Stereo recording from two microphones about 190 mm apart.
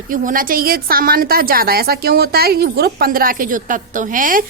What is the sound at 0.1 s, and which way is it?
A woman's voice, 45° right (ahead or behind).